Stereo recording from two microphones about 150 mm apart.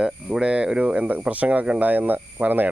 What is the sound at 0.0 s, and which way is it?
Speech, 5° right (ahead or behind).